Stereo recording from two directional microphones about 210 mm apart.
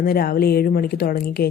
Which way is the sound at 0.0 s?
45° left (ahead or behind).